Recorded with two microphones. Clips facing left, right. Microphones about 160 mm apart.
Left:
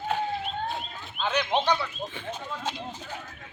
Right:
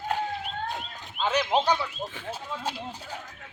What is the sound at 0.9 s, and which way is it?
Speech, 10° right (ahead or behind).